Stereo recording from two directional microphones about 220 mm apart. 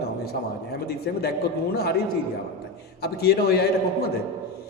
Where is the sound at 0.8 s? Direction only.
45° left (ahead or behind).